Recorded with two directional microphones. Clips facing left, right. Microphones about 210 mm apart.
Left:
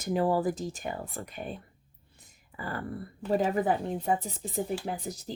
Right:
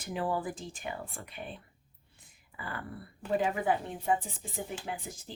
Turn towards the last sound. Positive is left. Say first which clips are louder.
# left 5 dB
turn(degrees=40)  # may be behind; listen again after turning